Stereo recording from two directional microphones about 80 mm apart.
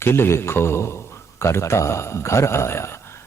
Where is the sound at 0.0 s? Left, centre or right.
Left.